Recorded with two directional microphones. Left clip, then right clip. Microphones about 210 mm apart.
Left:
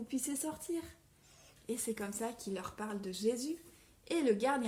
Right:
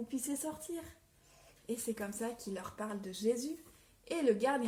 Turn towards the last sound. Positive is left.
turn(degrees=40)  # may be behind; listen again after turning